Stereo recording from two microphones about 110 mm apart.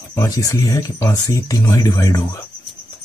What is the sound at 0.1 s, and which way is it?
Speech, 30° left (ahead or behind).